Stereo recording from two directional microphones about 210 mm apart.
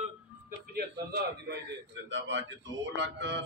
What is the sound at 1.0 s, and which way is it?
Speech, 50° right (ahead or behind).